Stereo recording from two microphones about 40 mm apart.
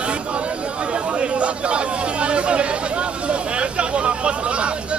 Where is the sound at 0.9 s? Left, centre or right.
Right.